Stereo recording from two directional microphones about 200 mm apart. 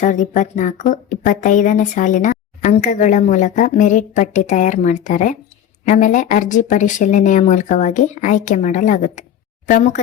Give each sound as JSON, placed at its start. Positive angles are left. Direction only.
{"t": 0.0, "sound": "a woman's voice", "side_deg": 40}